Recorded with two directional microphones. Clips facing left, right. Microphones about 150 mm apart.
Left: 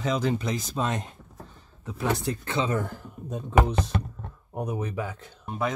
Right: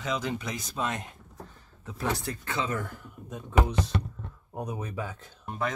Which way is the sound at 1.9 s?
20° left (ahead or behind).